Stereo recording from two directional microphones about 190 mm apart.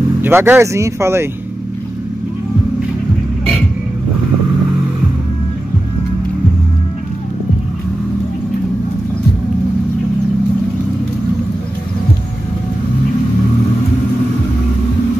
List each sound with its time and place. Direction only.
0.2 s speech: 10° right (ahead or behind)